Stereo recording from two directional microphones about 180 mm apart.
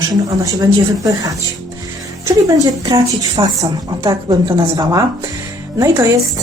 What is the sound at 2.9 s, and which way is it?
A woman's voice, 20° right (ahead or behind).